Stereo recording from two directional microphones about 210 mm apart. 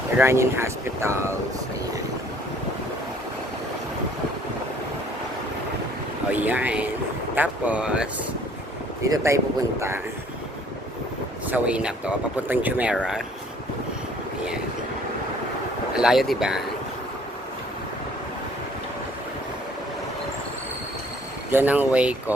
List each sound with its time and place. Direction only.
0.2 s speech: 10° right (ahead or behind)
6.3 s speech: 10° right (ahead or behind)
9.0 s speech: 15° right (ahead or behind)
11.4 s speech: 5° right (ahead or behind)
16.0 s speech: centre (ahead or behind)
21.5 s speech: 10° right (ahead or behind)